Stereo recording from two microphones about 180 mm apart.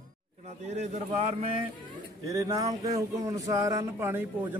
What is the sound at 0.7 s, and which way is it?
Speech, 40° right (ahead or behind).